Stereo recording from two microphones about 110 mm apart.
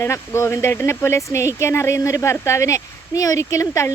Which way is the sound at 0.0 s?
25° left (ahead or behind).